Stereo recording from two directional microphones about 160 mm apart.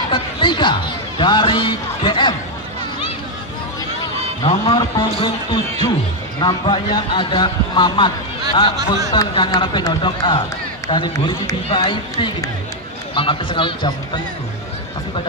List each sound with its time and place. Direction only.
0.1 s speech: 30° left (ahead or behind)
4.4 s a man's voice: 30° left (ahead or behind)
9.1 s a man's voice: 30° left (ahead or behind)